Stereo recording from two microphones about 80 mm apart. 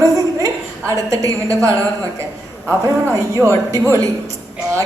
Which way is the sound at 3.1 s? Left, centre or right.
Right.